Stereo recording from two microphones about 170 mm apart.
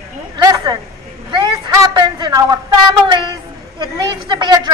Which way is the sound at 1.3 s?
25° right (ahead or behind).